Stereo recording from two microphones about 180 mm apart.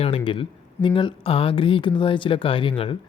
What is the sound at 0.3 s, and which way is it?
Speech, 30° left (ahead or behind).